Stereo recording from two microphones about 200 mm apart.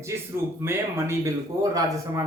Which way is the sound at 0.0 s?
15° right (ahead or behind).